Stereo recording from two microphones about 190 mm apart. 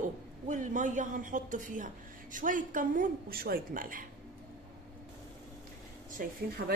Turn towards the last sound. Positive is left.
turn(degrees=-50)  # may be behind; listen again after turning